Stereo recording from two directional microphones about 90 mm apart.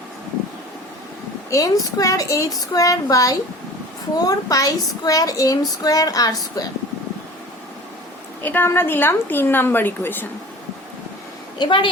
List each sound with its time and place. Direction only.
1.5 s a woman's voice: 40° left (ahead or behind)
8.4 s a woman's voice: 25° left (ahead or behind)
11.5 s speech: 60° left (ahead or behind)